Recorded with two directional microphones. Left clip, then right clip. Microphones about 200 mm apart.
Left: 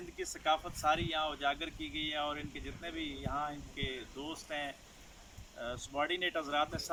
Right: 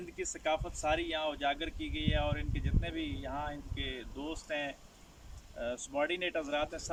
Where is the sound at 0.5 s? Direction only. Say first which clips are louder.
Left 2 dB; 15° right (ahead or behind).